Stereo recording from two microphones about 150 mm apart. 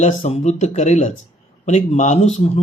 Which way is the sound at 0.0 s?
55° left (ahead or behind).